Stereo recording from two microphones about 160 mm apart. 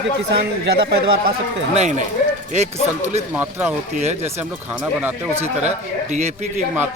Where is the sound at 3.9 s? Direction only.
45° right (ahead or behind).